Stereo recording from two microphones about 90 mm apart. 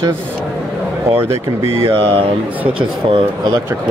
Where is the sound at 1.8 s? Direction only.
75° right (ahead or behind).